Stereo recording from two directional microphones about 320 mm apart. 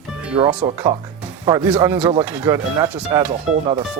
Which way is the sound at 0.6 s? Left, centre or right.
Centre.